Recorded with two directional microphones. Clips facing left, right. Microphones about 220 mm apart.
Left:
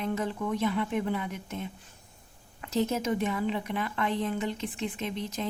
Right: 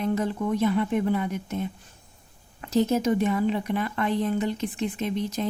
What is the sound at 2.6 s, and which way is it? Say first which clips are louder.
A woman's voice: right 6 dB; 40° right (ahead or behind).